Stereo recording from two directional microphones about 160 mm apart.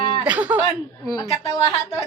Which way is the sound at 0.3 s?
10° right (ahead or behind).